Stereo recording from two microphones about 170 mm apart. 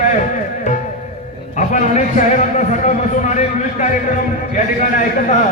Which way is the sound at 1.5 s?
45° left (ahead or behind).